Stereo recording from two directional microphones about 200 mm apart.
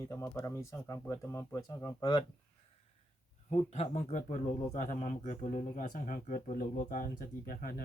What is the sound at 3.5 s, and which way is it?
Speech, 35° left (ahead or behind).